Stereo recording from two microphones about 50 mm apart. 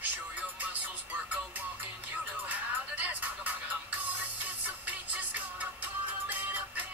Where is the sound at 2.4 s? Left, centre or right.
Right.